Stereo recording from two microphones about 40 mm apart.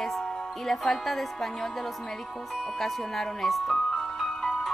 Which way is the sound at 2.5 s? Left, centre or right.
Centre.